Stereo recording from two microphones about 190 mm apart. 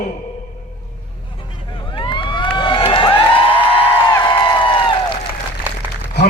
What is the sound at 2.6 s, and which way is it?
Crowd, 25° left (ahead or behind).